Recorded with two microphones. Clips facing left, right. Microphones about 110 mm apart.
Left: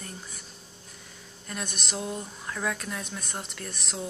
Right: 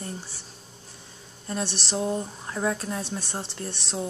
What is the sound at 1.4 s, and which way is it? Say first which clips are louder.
Speech: right 6 dB; 30° right (ahead or behind).